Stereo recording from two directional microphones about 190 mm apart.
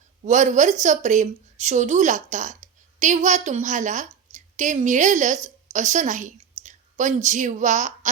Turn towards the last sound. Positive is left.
turn(degrees=-40)  # may be behind; listen again after turning